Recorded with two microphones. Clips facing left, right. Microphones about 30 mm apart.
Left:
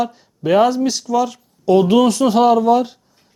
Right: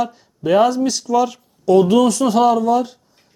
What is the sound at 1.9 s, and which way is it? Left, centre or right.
Speech, left.